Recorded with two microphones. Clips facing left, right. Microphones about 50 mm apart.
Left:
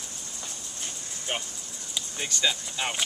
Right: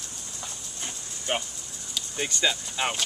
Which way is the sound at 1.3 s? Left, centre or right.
Centre.